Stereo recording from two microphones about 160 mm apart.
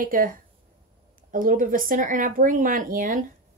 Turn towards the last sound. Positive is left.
turn(degrees=-60)  # may be behind; listen again after turning